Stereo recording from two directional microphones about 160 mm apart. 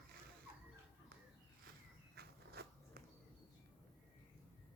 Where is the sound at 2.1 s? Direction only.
75° right (ahead or behind).